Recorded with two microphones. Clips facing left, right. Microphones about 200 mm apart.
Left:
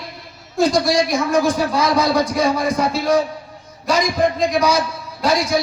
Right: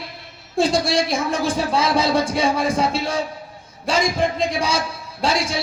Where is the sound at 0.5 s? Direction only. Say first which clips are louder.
Left 2 dB; 30° right (ahead or behind).